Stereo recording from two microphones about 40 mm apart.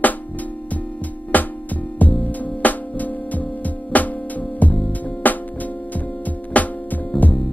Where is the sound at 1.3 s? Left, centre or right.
Left.